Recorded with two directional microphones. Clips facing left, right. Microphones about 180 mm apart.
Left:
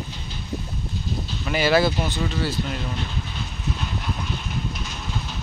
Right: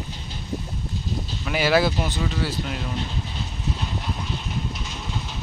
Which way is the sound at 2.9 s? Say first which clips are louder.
Right 1 dB; 30° right (ahead or behind).